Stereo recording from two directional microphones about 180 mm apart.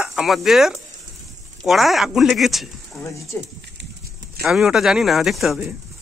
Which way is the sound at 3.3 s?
10° left (ahead or behind).